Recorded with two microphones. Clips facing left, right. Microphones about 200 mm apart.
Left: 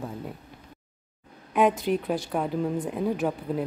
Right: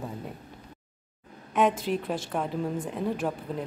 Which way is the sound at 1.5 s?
Centre (ahead or behind).